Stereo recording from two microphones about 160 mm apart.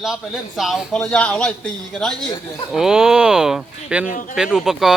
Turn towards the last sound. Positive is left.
turn(degrees=0)  # may be behind; listen again after turning